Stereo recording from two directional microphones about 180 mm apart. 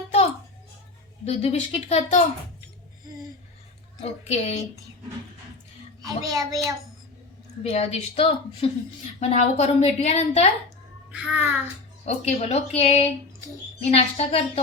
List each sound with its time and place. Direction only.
1.2 s a woman's voice: 35° left (ahead or behind)
4.0 s a woman's voice: 35° left (ahead or behind)
6.0 s a child's voice: 20° right (ahead or behind)
7.6 s a woman's voice: 35° left (ahead or behind)
11.1 s a child's voice: 5° right (ahead or behind)
12.0 s a woman's voice: 35° left (ahead or behind)